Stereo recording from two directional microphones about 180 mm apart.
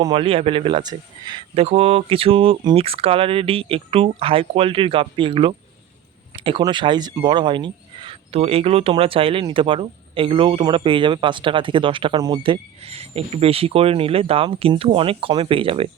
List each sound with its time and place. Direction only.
0.0 s speech: 30° right (ahead or behind)